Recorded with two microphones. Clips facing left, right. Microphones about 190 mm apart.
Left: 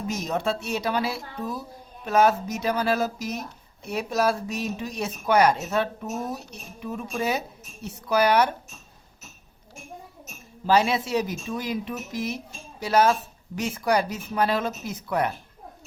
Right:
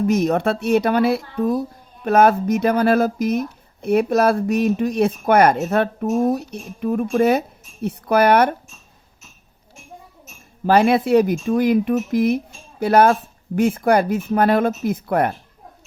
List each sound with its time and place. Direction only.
0.1 s speech: 55° right (ahead or behind)
10.7 s speech: 55° right (ahead or behind)